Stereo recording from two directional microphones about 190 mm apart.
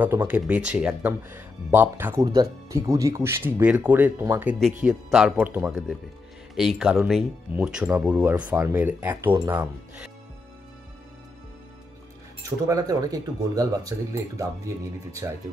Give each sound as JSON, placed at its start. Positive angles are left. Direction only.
{"t": 0.0, "sound": "speech", "side_deg": -10}
{"t": 2.2, "sound": "speech", "side_deg": -20}
{"t": 12.4, "sound": "speech", "side_deg": -15}